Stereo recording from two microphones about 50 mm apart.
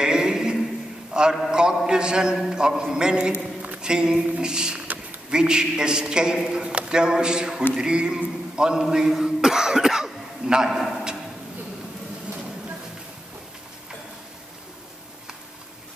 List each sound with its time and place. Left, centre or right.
0.0 s a sound: centre
1.5 s a man's voice: centre
10.8 s a man's voice: centre